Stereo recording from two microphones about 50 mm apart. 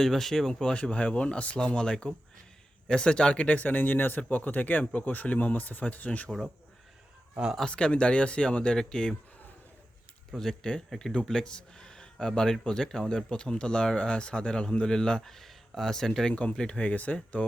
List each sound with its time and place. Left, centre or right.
0.0 s speech: centre; by 3.8 s left
3.8 s speech: left
7.6 s speech: centre
10.3 s speech: centre
16.3 s speech: left